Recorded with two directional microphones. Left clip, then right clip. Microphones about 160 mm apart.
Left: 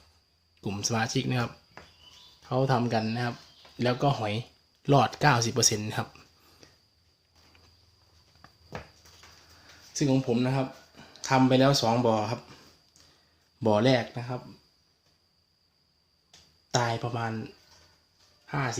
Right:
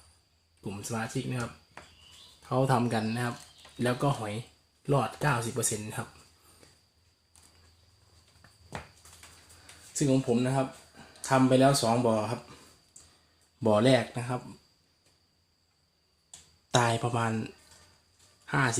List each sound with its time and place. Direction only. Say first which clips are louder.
0.6 s speech: left 6 dB; 20° left (ahead or behind)
2.4 s speech: even; centre (ahead or behind)
4.8 s speech: left 6 dB; 15° left (ahead or behind)
9.9 s speech: even; 5° left (ahead or behind)
13.6 s speech: even; centre (ahead or behind)
16.7 s speech: right 2 dB; 15° right (ahead or behind)